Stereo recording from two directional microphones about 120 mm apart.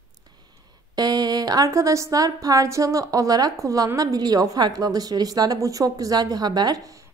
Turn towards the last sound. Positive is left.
turn(degrees=-35)  # may be behind; listen again after turning